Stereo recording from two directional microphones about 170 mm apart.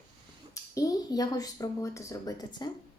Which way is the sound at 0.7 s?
20° left (ahead or behind).